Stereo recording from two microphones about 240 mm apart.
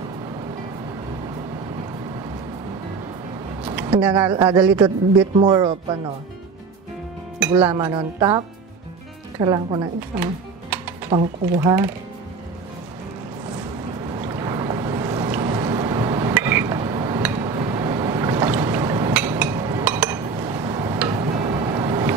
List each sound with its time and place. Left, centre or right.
3.6 s a sound: centre
4.1 s speech: centre
7.5 s speech: centre
11.1 s speech: right
11.5 s speech: centre
14.2 s boat: centre
19.8 s chink: centre
20.4 s a sound: centre
21.1 s music: right